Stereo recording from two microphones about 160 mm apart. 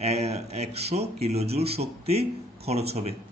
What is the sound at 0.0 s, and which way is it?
A man's voice, 40° right (ahead or behind).